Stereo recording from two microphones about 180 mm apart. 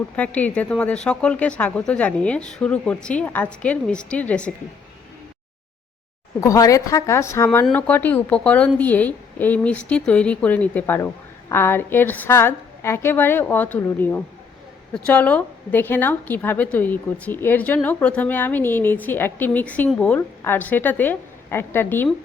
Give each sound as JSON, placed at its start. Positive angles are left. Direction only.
{"t": 0.2, "sound": "a woman's voice", "side_deg": 10}
{"t": 6.4, "sound": "a woman's voice", "side_deg": 20}